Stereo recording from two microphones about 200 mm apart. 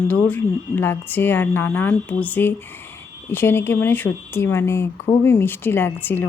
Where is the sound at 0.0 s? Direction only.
20° left (ahead or behind).